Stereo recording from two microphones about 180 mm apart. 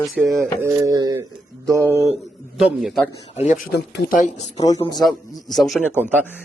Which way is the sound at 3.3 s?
40° left (ahead or behind).